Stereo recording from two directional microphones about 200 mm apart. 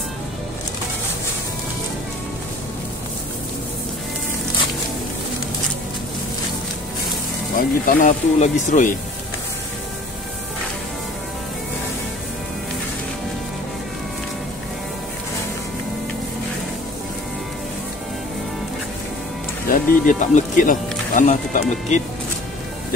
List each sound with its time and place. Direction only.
7.5 s speech: 40° left (ahead or behind)
19.7 s speech: 40° left (ahead or behind)